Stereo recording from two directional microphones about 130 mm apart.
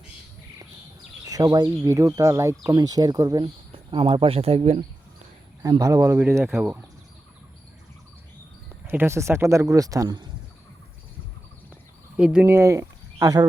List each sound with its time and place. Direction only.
1.2 s speech: 30° right (ahead or behind)
3.4 s speech: 45° right (ahead or behind)
5.8 s speech: 25° right (ahead or behind)
8.9 s speech: 20° right (ahead or behind)
12.1 s speech: 10° right (ahead or behind); by 13.5 s 25° right (ahead or behind)